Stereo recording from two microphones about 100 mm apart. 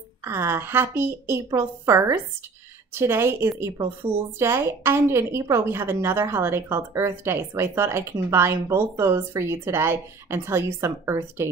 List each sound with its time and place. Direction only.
0.2 s a woman's voice: 25° right (ahead or behind)